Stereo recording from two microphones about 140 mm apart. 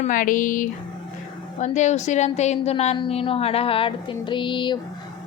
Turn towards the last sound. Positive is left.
turn(degrees=35)  # may be behind; listen again after turning